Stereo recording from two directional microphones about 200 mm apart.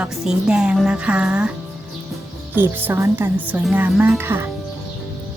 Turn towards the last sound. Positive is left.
turn(degrees=-10)  # may be behind; listen again after turning